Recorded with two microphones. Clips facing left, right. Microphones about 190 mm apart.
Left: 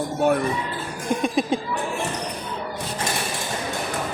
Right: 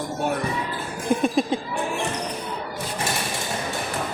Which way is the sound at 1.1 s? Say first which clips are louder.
Right 2 dB; 5° right (ahead or behind).